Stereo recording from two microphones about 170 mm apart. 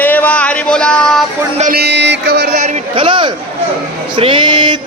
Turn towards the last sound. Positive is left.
turn(degrees=-25)  # may be behind; listen again after turning